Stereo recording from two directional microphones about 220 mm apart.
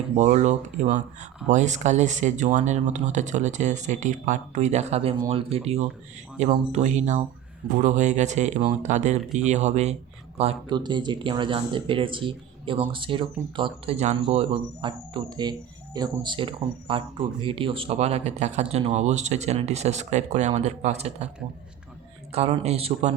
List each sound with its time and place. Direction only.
0.2 s speech: 30° right (ahead or behind)
22.3 s speech: 30° right (ahead or behind)